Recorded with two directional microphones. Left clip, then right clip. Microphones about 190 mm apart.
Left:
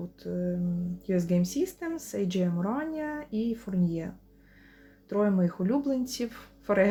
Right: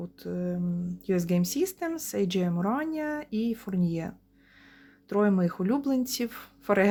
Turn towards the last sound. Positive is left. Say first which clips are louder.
# even
turn(degrees=-45)  # may be behind; listen again after turning